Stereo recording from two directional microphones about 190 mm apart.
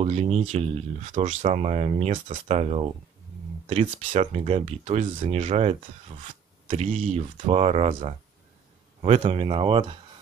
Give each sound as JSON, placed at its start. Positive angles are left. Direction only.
{"t": 0.0, "sound": "speech", "side_deg": -35}